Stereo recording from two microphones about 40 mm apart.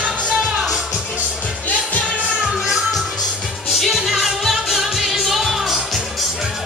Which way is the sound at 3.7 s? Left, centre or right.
Centre.